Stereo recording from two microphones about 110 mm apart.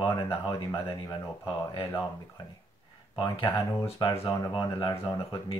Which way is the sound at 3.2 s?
55° left (ahead or behind).